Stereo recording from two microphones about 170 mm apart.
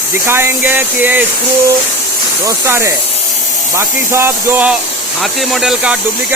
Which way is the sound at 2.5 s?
15° right (ahead or behind).